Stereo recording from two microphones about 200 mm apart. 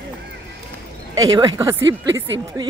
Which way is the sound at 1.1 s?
15° right (ahead or behind).